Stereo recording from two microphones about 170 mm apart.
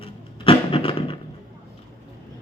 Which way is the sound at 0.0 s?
30° left (ahead or behind).